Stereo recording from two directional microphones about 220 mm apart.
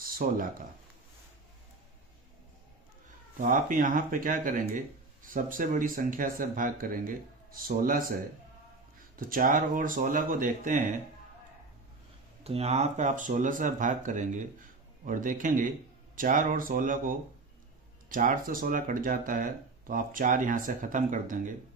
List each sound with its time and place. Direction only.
0.0 s a sound: 40° right (ahead or behind)
3.4 s speech: 40° right (ahead or behind)
9.1 s speech: 40° right (ahead or behind)
12.4 s speech: 25° right (ahead or behind)